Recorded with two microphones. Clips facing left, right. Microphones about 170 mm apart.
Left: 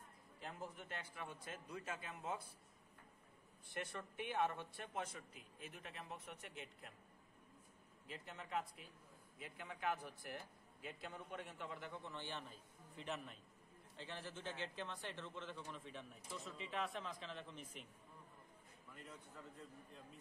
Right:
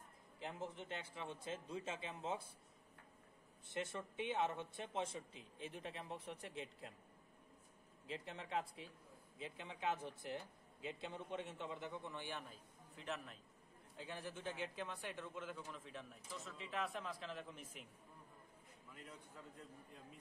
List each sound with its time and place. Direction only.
0.4 s a man's voice: 25° right (ahead or behind)
3.6 s a man's voice: 20° right (ahead or behind)
8.1 s a man's voice: 30° right (ahead or behind); by 13.4 s centre (ahead or behind)
13.9 s a man's voice: 10° right (ahead or behind)